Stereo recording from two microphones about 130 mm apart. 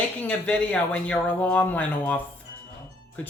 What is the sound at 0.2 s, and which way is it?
Speech, 10° left (ahead or behind).